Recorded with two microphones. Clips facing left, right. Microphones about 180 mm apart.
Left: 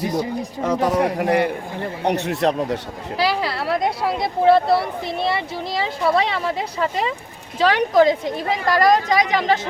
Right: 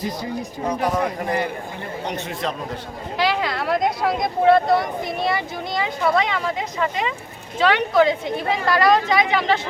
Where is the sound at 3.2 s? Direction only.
35° left (ahead or behind).